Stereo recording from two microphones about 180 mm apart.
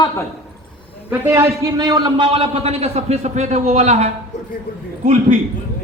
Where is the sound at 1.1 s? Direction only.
15° right (ahead or behind); by 4.1 s 40° right (ahead or behind).